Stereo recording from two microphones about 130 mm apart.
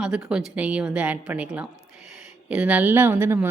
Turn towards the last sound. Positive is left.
turn(degrees=-15)  # may be behind; listen again after turning